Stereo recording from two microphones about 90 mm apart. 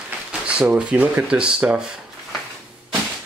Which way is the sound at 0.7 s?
15° right (ahead or behind).